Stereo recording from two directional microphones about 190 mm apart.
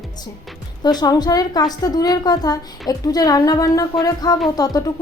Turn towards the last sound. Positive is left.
turn(degrees=20)  # may be behind; listen again after turning